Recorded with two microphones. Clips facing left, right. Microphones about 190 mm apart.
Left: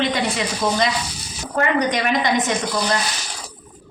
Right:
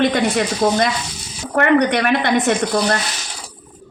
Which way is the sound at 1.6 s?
65° right (ahead or behind).